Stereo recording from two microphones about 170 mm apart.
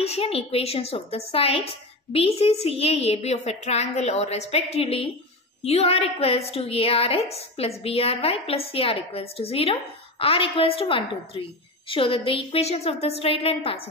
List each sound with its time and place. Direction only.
0.0 s a woman's voice: 35° left (ahead or behind)